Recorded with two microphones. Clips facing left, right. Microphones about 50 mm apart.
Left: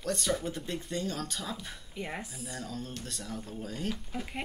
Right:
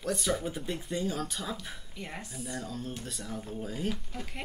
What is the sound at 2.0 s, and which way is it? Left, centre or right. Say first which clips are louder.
Speech: left 5 dB; centre.